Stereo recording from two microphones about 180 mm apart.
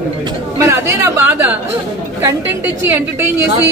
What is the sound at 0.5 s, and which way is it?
Speech, 15° right (ahead or behind).